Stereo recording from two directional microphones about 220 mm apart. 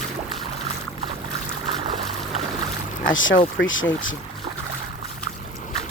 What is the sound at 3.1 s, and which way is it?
Speech, 60° left (ahead or behind).